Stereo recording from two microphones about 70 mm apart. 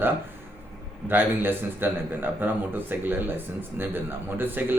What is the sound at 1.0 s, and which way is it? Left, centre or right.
A man's voice, right.